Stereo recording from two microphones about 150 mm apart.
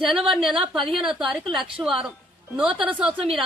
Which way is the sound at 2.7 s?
35° right (ahead or behind).